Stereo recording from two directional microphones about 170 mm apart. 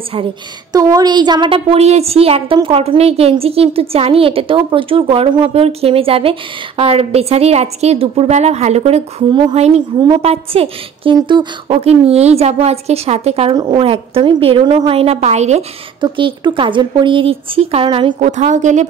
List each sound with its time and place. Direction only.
0.7 s a woman's voice: 20° right (ahead or behind)
10.2 s a woman's voice: 35° right (ahead or behind)
16.0 s speech: 30° right (ahead or behind)
18.2 s a woman's voice: 45° right (ahead or behind)